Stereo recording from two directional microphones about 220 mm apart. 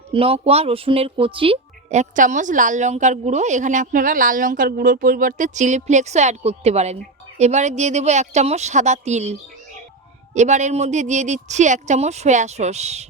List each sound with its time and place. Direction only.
0.1 s speech: 25° right (ahead or behind)
10.3 s speech: 30° right (ahead or behind)